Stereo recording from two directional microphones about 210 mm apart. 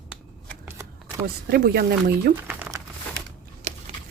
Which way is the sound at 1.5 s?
50° right (ahead or behind).